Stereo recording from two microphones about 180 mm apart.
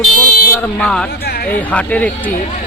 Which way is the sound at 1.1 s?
60° left (ahead or behind).